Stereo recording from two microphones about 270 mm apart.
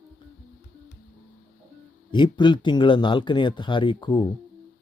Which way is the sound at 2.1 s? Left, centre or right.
Centre.